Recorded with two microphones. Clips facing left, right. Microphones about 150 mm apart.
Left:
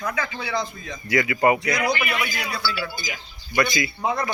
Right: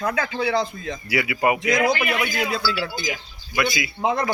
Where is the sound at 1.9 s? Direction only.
90° right.